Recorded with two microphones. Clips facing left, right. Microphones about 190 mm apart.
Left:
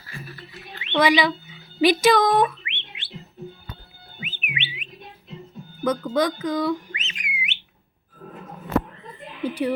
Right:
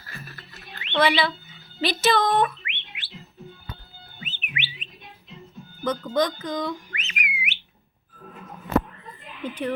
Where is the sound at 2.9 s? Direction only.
25° left (ahead or behind).